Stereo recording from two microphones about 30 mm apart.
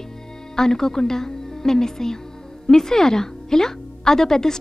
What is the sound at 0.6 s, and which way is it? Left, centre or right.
Speech, centre.